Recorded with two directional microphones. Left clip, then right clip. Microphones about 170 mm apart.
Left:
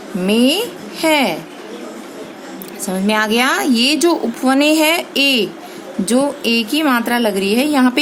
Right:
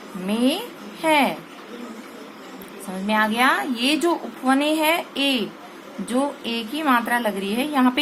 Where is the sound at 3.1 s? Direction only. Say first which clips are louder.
Left 4 dB; 35° left (ahead or behind).